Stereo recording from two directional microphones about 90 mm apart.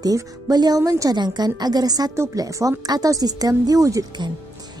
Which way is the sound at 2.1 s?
35° right (ahead or behind).